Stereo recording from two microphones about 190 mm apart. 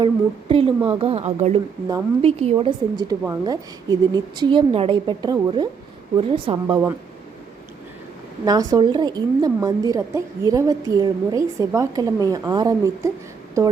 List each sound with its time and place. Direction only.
0.0 s a woman's voice: 30° right (ahead or behind)
8.4 s a woman's voice: 20° right (ahead or behind)